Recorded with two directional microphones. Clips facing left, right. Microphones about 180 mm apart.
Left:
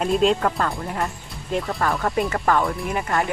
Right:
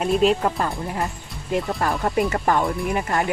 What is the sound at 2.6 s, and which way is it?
Speech, centre (ahead or behind).